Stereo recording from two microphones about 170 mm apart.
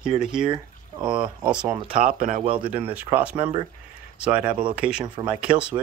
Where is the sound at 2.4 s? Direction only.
30° right (ahead or behind).